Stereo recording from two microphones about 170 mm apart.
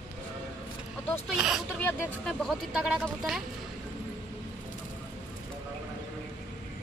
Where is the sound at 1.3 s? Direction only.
5° right (ahead or behind).